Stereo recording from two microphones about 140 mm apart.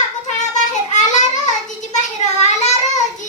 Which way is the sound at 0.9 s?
60° left (ahead or behind).